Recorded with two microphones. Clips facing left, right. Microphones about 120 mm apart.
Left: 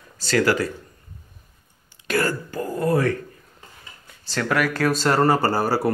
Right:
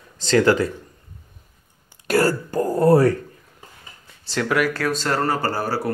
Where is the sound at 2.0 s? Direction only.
40° right (ahead or behind).